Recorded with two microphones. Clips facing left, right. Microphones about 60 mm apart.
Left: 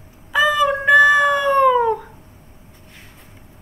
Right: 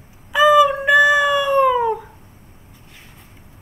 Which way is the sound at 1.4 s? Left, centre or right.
Centre.